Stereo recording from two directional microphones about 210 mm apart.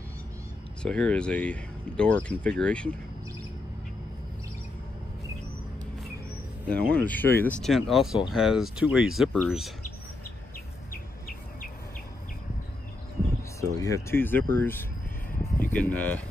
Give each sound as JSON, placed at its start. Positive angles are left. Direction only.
{"t": 0.8, "sound": "speech", "side_deg": 5}
{"t": 6.8, "sound": "speech", "side_deg": -45}
{"t": 7.1, "sound": "speech", "side_deg": 10}
{"t": 10.9, "sound": "bird", "side_deg": 40}
{"t": 13.6, "sound": "speech", "side_deg": 15}